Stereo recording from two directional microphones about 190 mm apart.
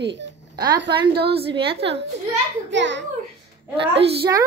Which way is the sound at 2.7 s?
70° right (ahead or behind).